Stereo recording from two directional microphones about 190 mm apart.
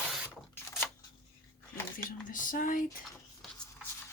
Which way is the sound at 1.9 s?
45° left (ahead or behind).